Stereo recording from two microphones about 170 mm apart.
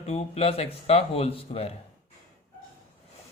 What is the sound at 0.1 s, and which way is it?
Speech, 35° left (ahead or behind).